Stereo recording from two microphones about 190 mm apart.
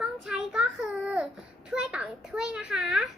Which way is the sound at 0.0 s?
5° right (ahead or behind).